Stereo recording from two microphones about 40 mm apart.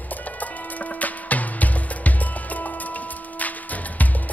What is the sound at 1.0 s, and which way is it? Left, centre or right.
Music, left.